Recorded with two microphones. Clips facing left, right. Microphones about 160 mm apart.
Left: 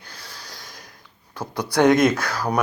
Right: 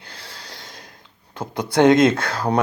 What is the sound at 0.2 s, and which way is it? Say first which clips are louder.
Snort: right 1 dB; 30° right (ahead or behind).